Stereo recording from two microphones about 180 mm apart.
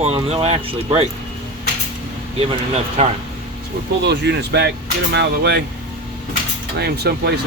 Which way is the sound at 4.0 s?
70° right (ahead or behind).